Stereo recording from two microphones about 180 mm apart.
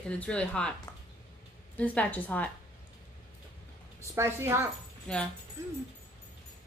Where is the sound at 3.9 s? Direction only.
15° right (ahead or behind).